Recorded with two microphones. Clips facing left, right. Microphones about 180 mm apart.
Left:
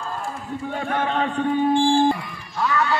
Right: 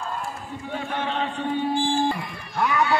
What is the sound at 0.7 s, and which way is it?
Speech, 50° left (ahead or behind).